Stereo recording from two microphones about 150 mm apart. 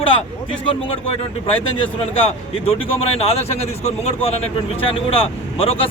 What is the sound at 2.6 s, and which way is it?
Speech, 40° left (ahead or behind).